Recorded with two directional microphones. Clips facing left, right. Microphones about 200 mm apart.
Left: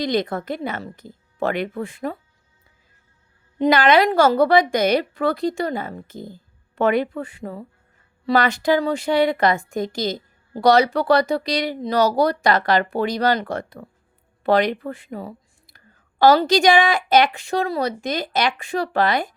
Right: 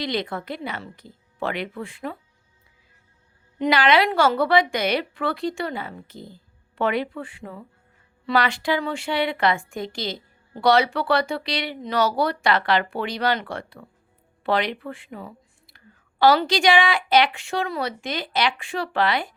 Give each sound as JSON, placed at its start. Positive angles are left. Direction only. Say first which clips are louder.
{"t": 0.0, "sound": "a woman's voice", "louder": "left 5 dB", "side_deg": 45}
{"t": 3.6, "sound": "a woman's voice", "louder": "left 4 dB", "side_deg": 45}